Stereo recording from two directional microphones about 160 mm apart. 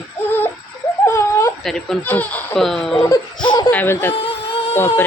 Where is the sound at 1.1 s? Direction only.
20° left (ahead or behind).